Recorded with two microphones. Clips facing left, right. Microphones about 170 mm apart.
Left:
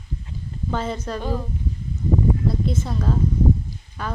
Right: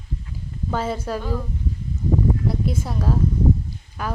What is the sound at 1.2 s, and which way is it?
Speech, 20° left (ahead or behind).